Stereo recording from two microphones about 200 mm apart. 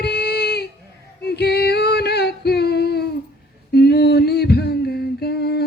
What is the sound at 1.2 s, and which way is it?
Female singing, 55° left (ahead or behind).